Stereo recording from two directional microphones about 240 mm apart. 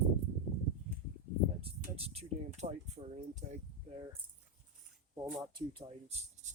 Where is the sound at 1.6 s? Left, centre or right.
Right.